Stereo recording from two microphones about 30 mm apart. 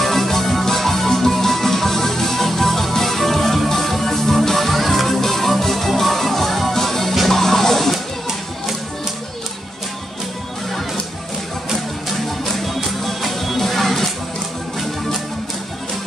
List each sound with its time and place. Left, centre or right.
0.0 s music: centre
12.5 s music: centre